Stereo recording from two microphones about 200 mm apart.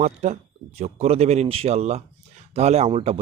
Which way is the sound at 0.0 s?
35° right (ahead or behind).